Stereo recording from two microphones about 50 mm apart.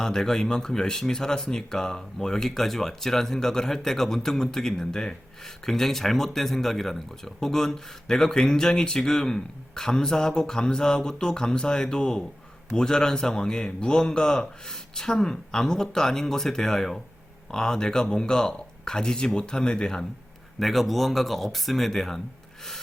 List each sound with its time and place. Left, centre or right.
0.0 s speech: centre
20.6 s speech: centre